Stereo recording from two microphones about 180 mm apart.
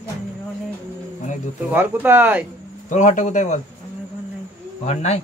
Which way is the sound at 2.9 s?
45° left (ahead or behind).